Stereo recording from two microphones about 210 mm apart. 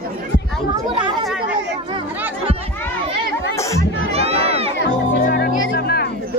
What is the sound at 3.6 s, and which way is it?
Chatter, 15° left (ahead or behind).